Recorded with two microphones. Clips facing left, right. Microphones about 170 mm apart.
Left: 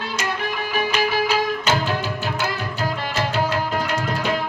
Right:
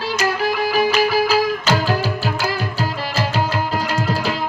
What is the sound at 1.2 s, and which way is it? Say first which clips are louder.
Music: right 3 dB; 35° right (ahead or behind).